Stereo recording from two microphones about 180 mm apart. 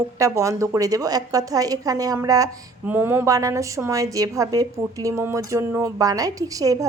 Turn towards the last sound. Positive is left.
turn(degrees=-20)  # may be behind; listen again after turning